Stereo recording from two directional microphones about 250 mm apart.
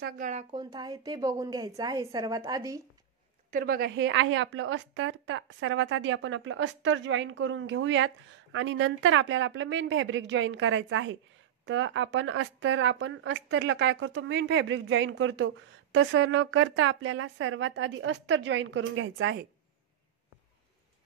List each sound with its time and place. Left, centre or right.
0.0 s a woman's voice: right; by 2.8 s centre
3.5 s speech: right